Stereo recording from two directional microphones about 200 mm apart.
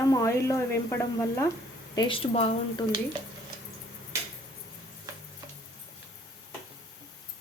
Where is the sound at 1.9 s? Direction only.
25° left (ahead or behind).